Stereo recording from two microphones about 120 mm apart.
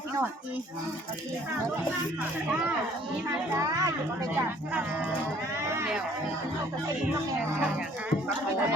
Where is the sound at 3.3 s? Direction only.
25° right (ahead or behind).